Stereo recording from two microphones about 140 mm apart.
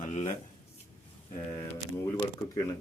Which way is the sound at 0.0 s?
55° left (ahead or behind).